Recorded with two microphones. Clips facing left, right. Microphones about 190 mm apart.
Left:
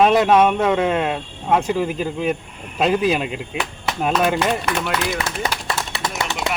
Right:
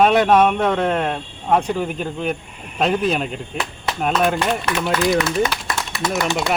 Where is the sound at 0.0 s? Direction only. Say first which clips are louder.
Even; 5° left (ahead or behind).